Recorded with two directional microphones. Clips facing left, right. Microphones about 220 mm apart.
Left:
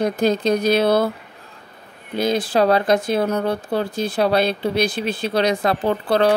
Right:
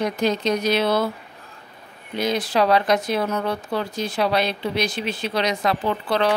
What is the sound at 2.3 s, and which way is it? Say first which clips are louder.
Speech: left 3 dB; 30° left (ahead or behind).